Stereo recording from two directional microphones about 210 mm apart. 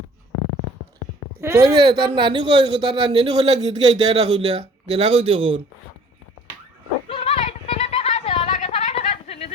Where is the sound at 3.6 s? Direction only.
20° right (ahead or behind).